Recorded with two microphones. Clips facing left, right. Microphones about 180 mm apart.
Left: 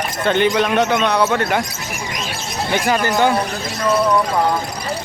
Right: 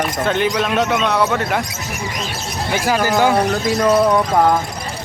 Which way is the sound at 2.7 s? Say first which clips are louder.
Even; 5° right (ahead or behind).